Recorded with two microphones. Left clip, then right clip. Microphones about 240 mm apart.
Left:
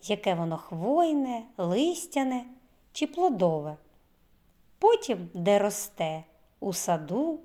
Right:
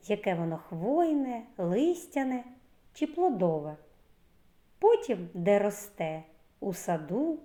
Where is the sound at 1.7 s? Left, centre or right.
Left.